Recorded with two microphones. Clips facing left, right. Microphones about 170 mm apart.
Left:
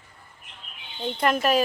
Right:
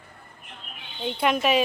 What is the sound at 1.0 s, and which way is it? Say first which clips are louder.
Speech: even; centre (ahead or behind).